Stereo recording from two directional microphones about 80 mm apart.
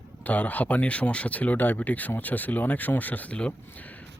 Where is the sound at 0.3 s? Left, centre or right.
Left.